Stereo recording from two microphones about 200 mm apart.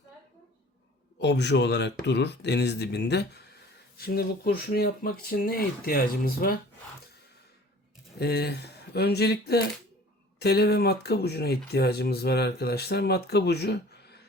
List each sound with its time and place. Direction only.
1.2 s speech: 60° left (ahead or behind)
8.2 s speech: 55° left (ahead or behind)